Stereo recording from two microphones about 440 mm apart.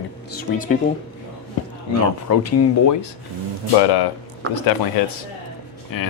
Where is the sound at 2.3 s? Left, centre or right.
Left.